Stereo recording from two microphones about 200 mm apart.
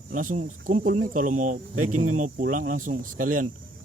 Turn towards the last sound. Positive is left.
turn(degrees=-45)  # may be behind; listen again after turning